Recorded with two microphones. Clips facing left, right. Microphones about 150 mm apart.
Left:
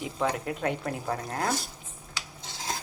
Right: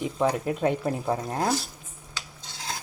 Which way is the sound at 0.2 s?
20° right (ahead or behind).